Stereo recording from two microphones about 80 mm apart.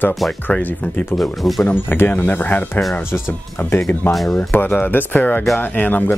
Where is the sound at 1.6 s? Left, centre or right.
Left.